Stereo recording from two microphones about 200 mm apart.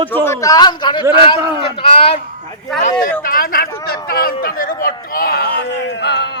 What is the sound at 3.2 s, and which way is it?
Speech, 45° left (ahead or behind).